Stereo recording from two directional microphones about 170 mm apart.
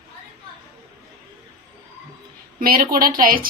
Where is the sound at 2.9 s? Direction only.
55° right (ahead or behind).